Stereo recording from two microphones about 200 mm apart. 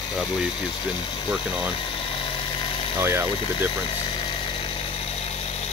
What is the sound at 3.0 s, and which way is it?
Speech, 10° right (ahead or behind).